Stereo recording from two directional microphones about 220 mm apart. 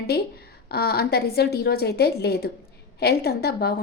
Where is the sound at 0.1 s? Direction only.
45° left (ahead or behind).